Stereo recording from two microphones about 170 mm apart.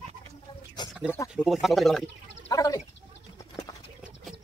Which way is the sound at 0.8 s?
25° left (ahead or behind).